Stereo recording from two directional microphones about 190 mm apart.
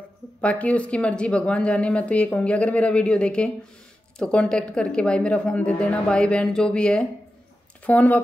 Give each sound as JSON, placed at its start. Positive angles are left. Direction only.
{"t": 0.4, "sound": "a woman's voice", "side_deg": 5}